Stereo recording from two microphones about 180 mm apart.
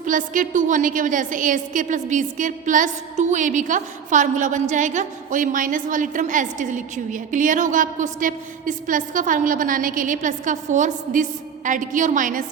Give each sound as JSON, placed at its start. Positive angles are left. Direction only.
{"t": 0.0, "sound": "a woman's voice", "side_deg": -45}